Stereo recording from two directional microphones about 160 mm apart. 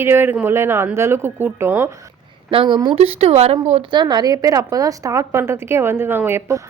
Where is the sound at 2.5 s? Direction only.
30° right (ahead or behind).